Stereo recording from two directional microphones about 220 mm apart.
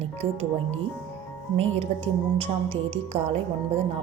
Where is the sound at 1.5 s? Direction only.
30° right (ahead or behind).